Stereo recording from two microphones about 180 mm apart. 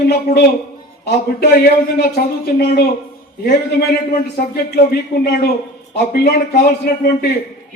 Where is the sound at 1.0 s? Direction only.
60° left (ahead or behind).